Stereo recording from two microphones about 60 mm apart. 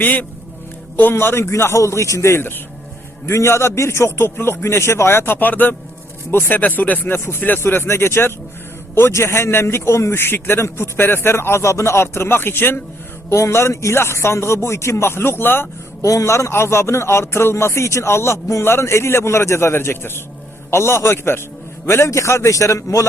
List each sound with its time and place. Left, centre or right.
0.0 s speech: left
1.1 s a man's voice: left
6.3 s a man's voice: left
6.6 s a man's voice: left
13.3 s a man's voice: left
16.0 s a man's voice: left